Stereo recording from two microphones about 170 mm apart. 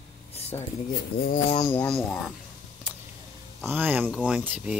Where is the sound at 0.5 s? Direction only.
25° left (ahead or behind).